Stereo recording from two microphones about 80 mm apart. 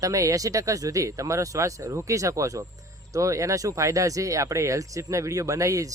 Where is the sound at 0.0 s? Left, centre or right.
Right.